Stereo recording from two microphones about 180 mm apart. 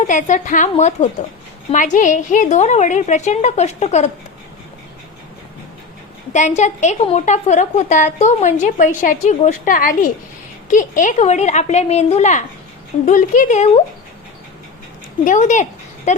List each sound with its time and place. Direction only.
0.0 s a woman's voice: 45° left (ahead or behind)
6.3 s a woman's voice: 40° left (ahead or behind)
15.2 s speech: 45° left (ahead or behind)